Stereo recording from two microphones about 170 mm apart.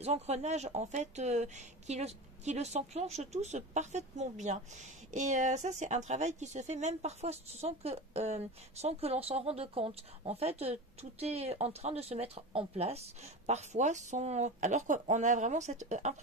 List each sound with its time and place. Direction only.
0.0 s speech: 40° right (ahead or behind)